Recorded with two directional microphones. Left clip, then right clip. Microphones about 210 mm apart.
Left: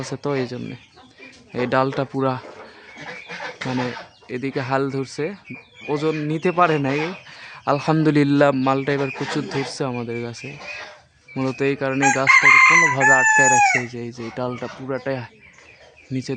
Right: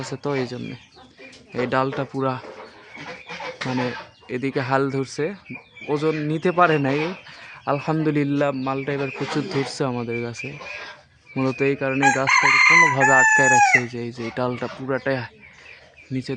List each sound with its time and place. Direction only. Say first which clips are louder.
0.1 s speech: left 1 dB; 10° left (ahead or behind)
4.3 s speech: right 1 dB; centre (ahead or behind); by 9.0 s 20° left (ahead or behind)
9.3 s speech: even; centre (ahead or behind)
12.4 s speech: left 2 dB; 15° left (ahead or behind)
12.8 s speech: even; 5° right (ahead or behind)